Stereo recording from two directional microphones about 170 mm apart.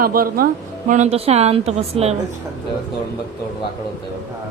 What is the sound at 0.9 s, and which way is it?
A woman's voice, 40° right (ahead or behind).